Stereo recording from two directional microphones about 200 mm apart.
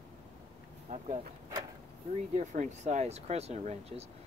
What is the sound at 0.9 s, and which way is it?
Speech, 35° right (ahead or behind).